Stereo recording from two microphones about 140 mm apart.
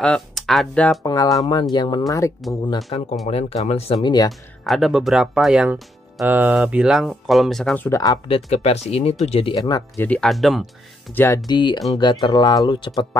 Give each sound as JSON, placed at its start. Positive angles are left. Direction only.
{"t": 0.0, "sound": "speech", "side_deg": 5}
{"t": 1.0, "sound": "speech", "side_deg": 25}
{"t": 2.9, "sound": "speech", "side_deg": 40}
{"t": 4.0, "sound": "speech", "side_deg": 30}
{"t": 4.3, "sound": "speech", "side_deg": 0}
{"t": 7.7, "sound": "speech", "side_deg": 20}
{"t": 8.5, "sound": "speech", "side_deg": 50}
{"t": 9.6, "sound": "speech", "side_deg": 25}
{"t": 10.0, "sound": "speech", "side_deg": 5}
{"t": 11.1, "sound": "speech", "side_deg": 15}
{"t": 11.4, "sound": "speech", "side_deg": 35}